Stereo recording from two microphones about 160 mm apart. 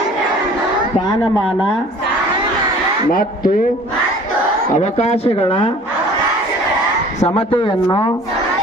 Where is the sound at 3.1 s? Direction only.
60° left (ahead or behind).